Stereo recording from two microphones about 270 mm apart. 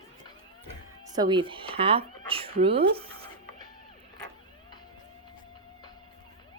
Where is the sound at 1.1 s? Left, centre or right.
Centre.